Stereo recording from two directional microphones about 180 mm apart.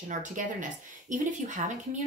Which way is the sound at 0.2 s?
45° right (ahead or behind).